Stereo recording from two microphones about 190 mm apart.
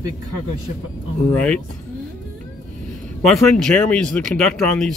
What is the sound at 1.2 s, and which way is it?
Speech, 5° left (ahead or behind).